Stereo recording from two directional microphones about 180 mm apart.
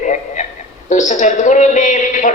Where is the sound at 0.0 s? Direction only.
45° left (ahead or behind).